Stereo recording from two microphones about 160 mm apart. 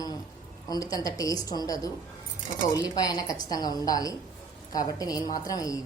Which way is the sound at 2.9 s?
25° left (ahead or behind).